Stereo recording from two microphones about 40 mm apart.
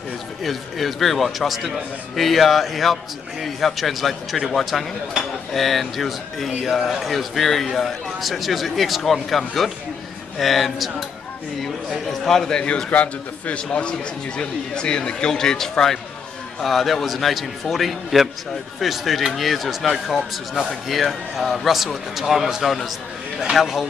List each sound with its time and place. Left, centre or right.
0.4 s speech: centre
10.4 s speech: centre
12.1 s speech: centre
12.9 s a man's voice: left; by 23.9 s centre